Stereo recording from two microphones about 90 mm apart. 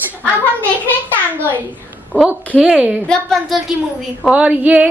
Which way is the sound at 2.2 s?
15° right (ahead or behind).